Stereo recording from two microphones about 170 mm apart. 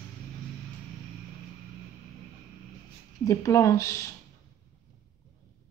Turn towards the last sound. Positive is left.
turn(degrees=20)  # may be behind; listen again after turning